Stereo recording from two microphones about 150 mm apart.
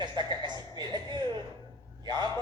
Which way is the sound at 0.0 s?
30° right (ahead or behind).